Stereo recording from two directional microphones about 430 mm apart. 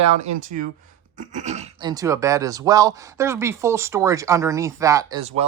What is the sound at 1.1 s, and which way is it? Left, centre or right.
Speech, centre.